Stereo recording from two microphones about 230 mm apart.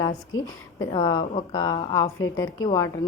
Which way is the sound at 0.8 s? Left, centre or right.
Centre.